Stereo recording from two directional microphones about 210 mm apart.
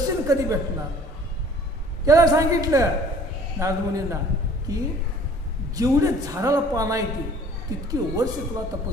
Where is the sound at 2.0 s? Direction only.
15° right (ahead or behind).